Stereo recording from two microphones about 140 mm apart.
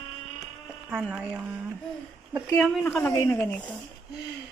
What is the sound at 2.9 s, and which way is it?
Speech, 10° left (ahead or behind).